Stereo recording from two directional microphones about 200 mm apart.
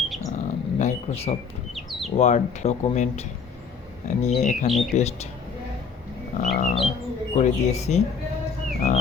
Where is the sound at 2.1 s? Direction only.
35° left (ahead or behind).